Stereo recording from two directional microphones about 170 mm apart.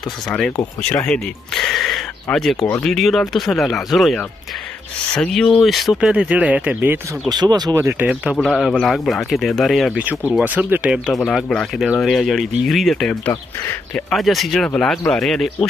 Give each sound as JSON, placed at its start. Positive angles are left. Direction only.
{"t": 0.8, "sound": "speech", "side_deg": 5}
{"t": 7.2, "sound": "speech", "side_deg": -25}
{"t": 8.1, "sound": "speech", "side_deg": -5}